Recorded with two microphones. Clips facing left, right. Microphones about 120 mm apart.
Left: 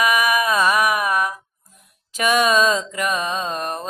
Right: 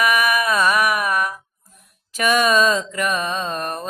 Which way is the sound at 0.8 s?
15° left (ahead or behind).